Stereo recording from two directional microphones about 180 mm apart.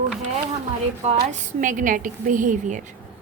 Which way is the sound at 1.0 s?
45° right (ahead or behind).